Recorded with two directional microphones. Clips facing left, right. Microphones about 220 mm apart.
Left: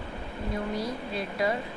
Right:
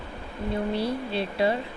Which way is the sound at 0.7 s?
30° right (ahead or behind).